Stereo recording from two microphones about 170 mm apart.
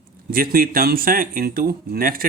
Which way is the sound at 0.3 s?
60° right (ahead or behind).